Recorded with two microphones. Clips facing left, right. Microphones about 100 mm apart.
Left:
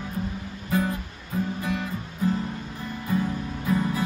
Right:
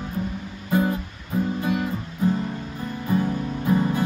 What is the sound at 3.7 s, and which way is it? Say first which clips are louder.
Music: right 3 dB; 25° right (ahead or behind).